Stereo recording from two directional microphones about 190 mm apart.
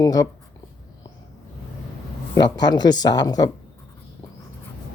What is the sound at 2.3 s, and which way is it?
Speech, 20° left (ahead or behind).